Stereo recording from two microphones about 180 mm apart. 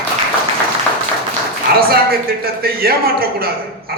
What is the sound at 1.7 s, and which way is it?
A man's voice, 60° right (ahead or behind).